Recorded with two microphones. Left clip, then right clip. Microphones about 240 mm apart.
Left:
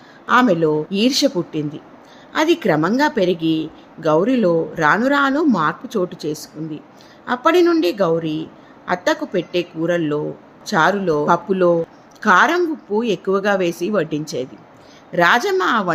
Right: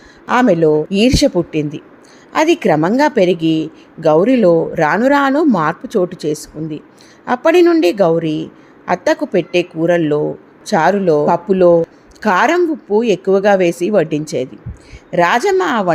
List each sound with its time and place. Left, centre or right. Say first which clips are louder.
0.3 s a woman's voice: right 3 dB; centre